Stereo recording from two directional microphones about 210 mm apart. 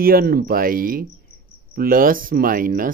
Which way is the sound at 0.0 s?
45° right (ahead or behind).